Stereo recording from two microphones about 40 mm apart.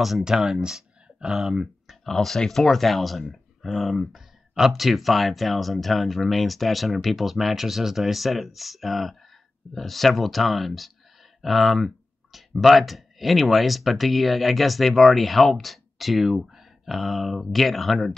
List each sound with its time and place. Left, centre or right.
0.2 s speech: centre
1.3 s speech: centre
2.0 s speech: centre